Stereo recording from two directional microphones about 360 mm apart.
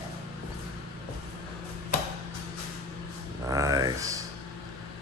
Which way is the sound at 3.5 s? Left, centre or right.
Centre.